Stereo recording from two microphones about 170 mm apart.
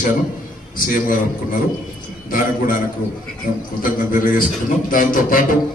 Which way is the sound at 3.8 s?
55° left (ahead or behind).